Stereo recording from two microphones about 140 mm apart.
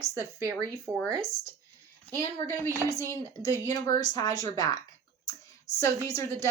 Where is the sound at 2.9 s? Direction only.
25° left (ahead or behind).